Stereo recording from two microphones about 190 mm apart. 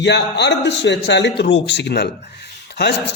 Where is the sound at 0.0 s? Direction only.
65° left (ahead or behind).